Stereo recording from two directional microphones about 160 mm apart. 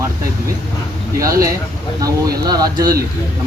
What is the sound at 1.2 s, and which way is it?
Speech, 20° right (ahead or behind).